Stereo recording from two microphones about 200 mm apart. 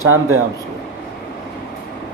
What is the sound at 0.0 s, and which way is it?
Speech, 90° right.